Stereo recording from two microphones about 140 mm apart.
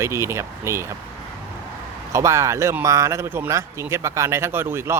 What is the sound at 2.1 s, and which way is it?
Speech, 20° right (ahead or behind).